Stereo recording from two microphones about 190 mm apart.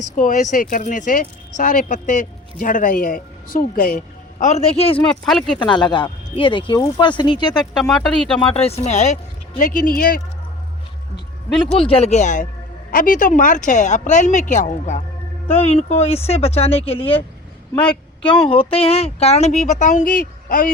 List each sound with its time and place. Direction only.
0.0 s speech: 40° left (ahead or behind)
5.2 s speech: centre (ahead or behind)
5.5 s speech: 25° left (ahead or behind)
7.7 s speech: centre (ahead or behind)
8.4 s speech: 30° left (ahead or behind); by 10.2 s 50° left (ahead or behind)
11.5 s speech: 5° left (ahead or behind)
11.8 s speech: 30° left (ahead or behind)
17.8 s speech: 5° left (ahead or behind)
18.4 s speech: 30° left (ahead or behind); by 20.7 s 45° left (ahead or behind)